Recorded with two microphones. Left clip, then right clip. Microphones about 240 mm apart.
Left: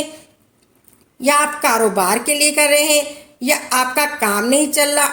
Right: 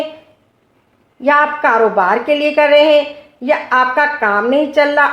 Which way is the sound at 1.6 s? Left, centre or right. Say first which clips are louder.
Right 4 dB; left.